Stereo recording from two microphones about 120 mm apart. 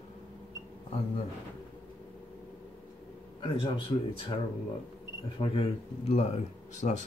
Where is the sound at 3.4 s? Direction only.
45° left (ahead or behind).